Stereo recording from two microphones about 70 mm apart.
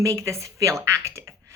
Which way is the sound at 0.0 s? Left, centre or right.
Right.